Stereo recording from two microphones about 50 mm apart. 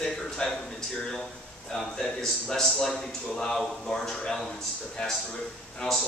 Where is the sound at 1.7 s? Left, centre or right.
Centre.